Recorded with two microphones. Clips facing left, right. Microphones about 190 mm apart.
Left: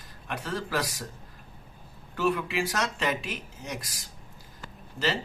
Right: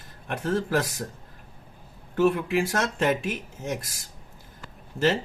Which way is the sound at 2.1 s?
50° right (ahead or behind).